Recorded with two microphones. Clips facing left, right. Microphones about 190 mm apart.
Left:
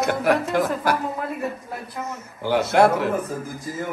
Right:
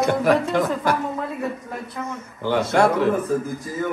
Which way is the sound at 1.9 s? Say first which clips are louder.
Right 1 dB; 5° left (ahead or behind).